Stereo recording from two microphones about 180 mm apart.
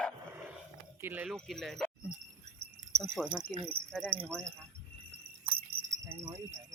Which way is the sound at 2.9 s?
65° right (ahead or behind).